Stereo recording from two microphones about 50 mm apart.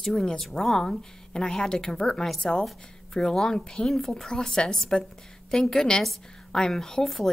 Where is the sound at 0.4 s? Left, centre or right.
Centre.